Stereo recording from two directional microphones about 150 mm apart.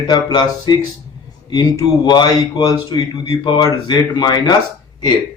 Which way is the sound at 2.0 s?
30° left (ahead or behind).